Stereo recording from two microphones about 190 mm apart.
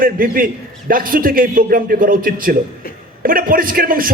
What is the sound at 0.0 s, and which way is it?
A man's voice, 50° right (ahead or behind).